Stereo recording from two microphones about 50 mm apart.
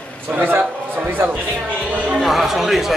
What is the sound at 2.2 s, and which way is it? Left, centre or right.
Speech, centre.